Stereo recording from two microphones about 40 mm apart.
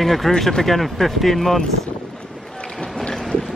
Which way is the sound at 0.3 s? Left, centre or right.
Centre.